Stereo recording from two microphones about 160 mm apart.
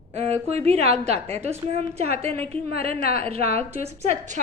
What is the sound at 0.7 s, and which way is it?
A woman's voice, 40° right (ahead or behind).